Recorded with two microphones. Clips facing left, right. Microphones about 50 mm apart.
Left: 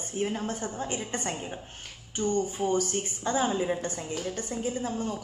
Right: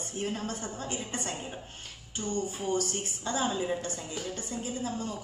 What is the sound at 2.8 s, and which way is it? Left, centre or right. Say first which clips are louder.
Speech: left 4 dB; left.